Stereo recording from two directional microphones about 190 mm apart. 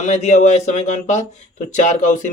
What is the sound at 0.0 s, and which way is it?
A man's voice, 35° left (ahead or behind).